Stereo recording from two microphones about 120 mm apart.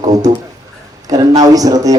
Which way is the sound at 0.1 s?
30° right (ahead or behind).